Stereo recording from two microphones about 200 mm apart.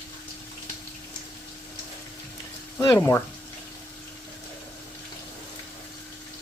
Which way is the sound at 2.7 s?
10° left (ahead or behind).